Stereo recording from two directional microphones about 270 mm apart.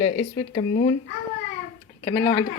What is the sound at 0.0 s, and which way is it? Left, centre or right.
Speech, centre.